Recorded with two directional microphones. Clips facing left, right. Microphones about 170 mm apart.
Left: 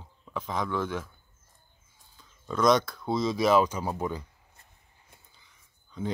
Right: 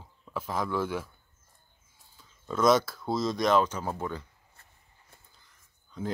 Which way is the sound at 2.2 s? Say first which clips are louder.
Even; 5° right (ahead or behind).